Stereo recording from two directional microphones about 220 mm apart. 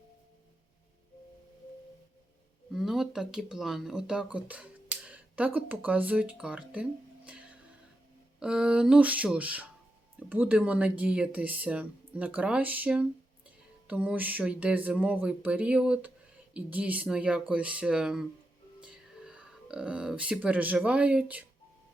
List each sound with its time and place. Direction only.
2.7 s speech: centre (ahead or behind)
7.3 s music: 5° right (ahead or behind)
8.4 s speech: 5° right (ahead or behind)